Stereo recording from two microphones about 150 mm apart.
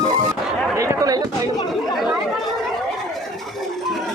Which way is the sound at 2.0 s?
Centre (ahead or behind).